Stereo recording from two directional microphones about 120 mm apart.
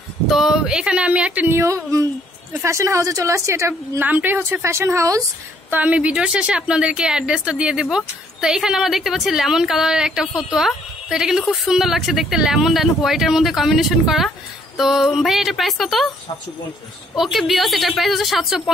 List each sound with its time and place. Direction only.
0.3 s a woman's voice: 5° right (ahead or behind); by 5.2 s 25° right (ahead or behind)
5.7 s a woman's voice: 10° right (ahead or behind)
17.1 s a woman's voice: centre (ahead or behind)